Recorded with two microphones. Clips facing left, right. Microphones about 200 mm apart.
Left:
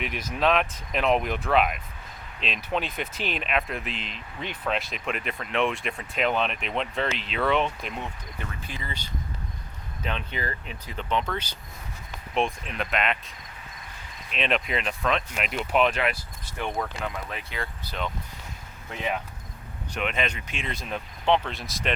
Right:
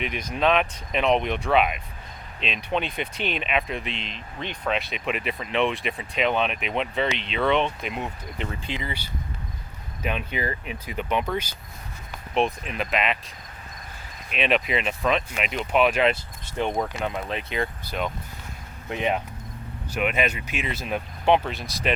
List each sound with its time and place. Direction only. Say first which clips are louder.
0.0 s speech: right 2 dB; 5° left (ahead or behind)
8.0 s speech: right 5 dB; 25° right (ahead or behind)
10.0 s speech: right 4 dB; 10° right (ahead or behind)
12.3 s speech: right 3 dB; centre (ahead or behind)
14.3 s speech: right 3 dB; 5° right (ahead or behind)
16.0 s speech: right 6 dB; 25° right (ahead or behind)
19.9 s speech: right 4 dB; 10° right (ahead or behind)
21.5 s speech: right 3 dB; centre (ahead or behind)